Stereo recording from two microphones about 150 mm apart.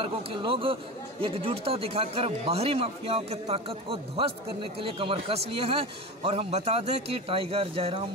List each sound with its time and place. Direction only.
0.0 s a man's voice: 35° right (ahead or behind)